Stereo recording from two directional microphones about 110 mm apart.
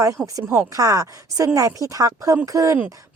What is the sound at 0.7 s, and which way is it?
Speech, 30° right (ahead or behind).